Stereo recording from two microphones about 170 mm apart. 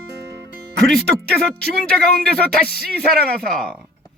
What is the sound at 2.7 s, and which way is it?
Speech, 65° right (ahead or behind).